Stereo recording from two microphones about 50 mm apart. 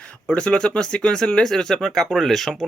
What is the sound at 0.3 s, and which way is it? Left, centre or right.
Speech, centre.